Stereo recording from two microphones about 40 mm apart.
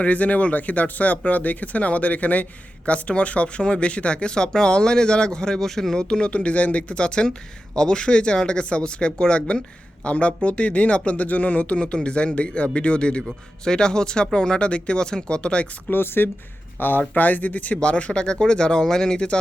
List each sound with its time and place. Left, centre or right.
0.0 s speech: left
5.5 s speech: centre
6.0 s speech: left
6.3 s speech: left
15.9 s speech: left
17.0 s speech: left
17.7 s speech: left